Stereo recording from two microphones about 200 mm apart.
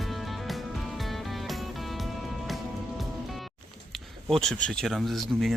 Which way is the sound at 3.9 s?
Centre (ahead or behind).